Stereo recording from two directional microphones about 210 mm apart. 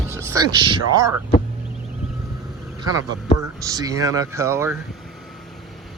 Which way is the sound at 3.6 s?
15° right (ahead or behind).